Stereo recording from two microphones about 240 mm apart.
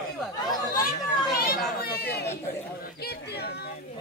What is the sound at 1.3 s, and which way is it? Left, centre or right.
Children playing, left.